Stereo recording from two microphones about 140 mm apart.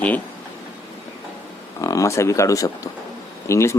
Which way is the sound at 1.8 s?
25° left (ahead or behind).